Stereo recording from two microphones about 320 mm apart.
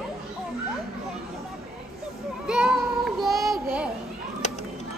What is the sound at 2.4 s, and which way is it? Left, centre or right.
Child singing, centre.